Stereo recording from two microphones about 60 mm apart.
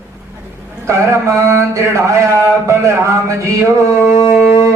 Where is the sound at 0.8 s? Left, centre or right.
Right.